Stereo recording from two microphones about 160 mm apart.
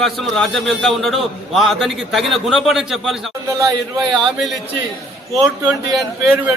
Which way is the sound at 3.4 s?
20° right (ahead or behind).